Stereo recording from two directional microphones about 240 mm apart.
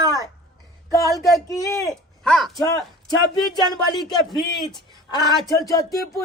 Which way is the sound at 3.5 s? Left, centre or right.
Centre.